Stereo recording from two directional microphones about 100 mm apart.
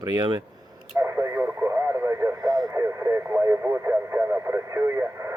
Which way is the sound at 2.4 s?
40° right (ahead or behind).